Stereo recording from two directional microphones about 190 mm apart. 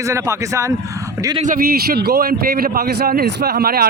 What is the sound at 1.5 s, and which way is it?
Speech, 50° right (ahead or behind).